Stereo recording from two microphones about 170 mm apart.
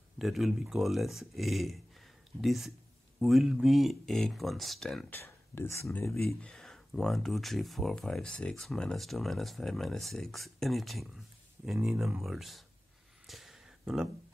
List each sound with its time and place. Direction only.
0.2 s speech: centre (ahead or behind)
5.2 s speech: 15° left (ahead or behind)
5.9 s speech: 5° left (ahead or behind)
13.3 s a sound: centre (ahead or behind)